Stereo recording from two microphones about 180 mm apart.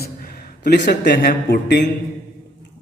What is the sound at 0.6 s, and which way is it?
A man's voice, 65° left (ahead or behind).